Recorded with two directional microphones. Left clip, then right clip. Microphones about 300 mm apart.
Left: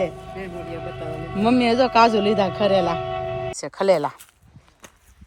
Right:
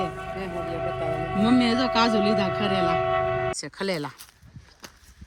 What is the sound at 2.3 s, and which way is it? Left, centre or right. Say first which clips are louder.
Speech: left 3 dB; left.